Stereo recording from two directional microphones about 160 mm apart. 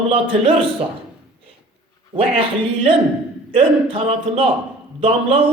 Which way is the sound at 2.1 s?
35° right (ahead or behind).